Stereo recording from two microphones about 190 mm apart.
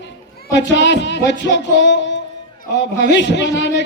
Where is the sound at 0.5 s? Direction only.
70° left (ahead or behind).